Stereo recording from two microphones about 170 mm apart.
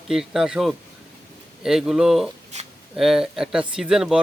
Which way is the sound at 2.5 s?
40° right (ahead or behind).